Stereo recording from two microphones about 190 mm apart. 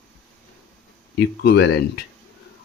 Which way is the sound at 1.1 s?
60° left (ahead or behind).